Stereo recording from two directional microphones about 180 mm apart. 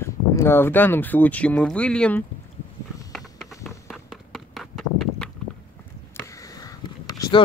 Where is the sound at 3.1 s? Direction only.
Centre (ahead or behind).